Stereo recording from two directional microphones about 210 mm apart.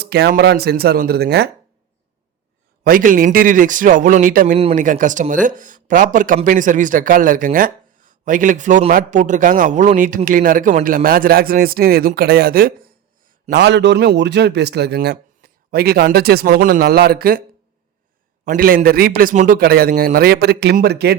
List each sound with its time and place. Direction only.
0.0 s a man's voice: 50° right (ahead or behind)
2.8 s speech: 40° right (ahead or behind)
13.5 s a man's voice: 55° right (ahead or behind)
18.4 s a man's voice: 45° right (ahead or behind)